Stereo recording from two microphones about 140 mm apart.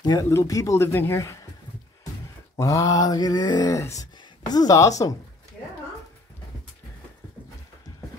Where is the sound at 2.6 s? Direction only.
25° left (ahead or behind).